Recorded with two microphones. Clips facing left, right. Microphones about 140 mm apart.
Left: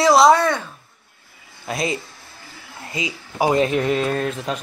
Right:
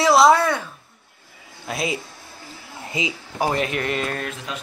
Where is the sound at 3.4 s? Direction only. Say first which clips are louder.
Left 4 dB; 10° left (ahead or behind).